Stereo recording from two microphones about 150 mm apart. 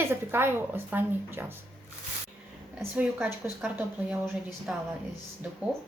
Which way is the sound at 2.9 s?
10° right (ahead or behind).